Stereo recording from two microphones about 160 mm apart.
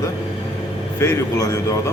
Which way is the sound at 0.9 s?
15° left (ahead or behind).